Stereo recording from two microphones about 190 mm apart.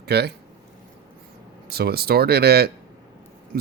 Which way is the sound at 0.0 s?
60° right (ahead or behind).